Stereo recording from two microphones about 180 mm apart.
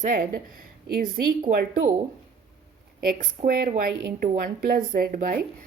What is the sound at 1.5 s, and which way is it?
Speech, 55° right (ahead or behind).